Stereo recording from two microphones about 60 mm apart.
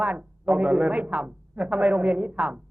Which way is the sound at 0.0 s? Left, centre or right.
Right.